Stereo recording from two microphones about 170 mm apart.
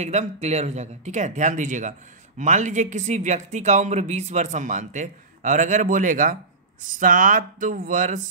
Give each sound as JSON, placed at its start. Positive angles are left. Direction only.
{"t": 0.0, "sound": "speech", "side_deg": -40}